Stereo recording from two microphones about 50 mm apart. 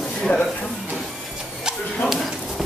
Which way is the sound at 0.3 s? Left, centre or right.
Left.